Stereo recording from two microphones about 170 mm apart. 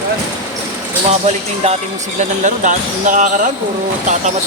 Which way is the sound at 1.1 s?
40° right (ahead or behind).